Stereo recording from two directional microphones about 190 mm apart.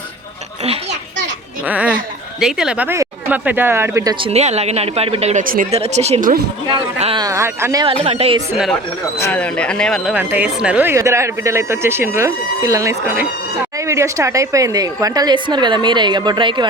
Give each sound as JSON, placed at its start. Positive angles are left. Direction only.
{"t": 1.6, "sound": "speech", "side_deg": -5}
{"t": 5.7, "sound": "speech", "side_deg": -35}
{"t": 6.7, "sound": "speech", "side_deg": -25}
{"t": 7.3, "sound": "speech", "side_deg": -15}
{"t": 7.9, "sound": "speech", "side_deg": -30}
{"t": 9.1, "sound": "speech", "side_deg": 10}
{"t": 10.2, "sound": "speech", "side_deg": -5}